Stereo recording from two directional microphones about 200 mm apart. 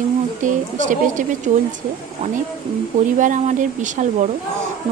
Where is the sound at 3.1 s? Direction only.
40° right (ahead or behind).